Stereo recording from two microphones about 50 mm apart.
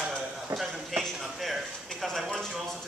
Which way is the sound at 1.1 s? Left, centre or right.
Centre.